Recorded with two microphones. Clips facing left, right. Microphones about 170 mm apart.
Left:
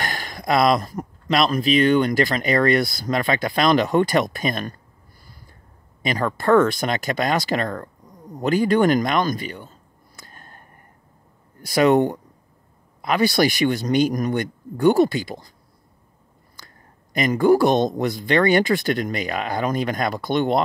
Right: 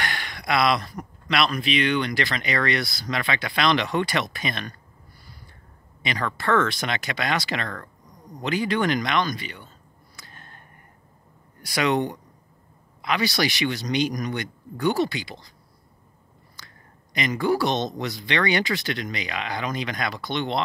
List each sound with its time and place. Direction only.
0.0 s a sound: 40° left (ahead or behind)
1.3 s speech: 40° left (ahead or behind)
6.0 s speech: 45° left (ahead or behind)
10.2 s a sound: 45° left (ahead or behind)
11.8 s speech: 45° left (ahead or behind)
17.1 s speech: 45° left (ahead or behind)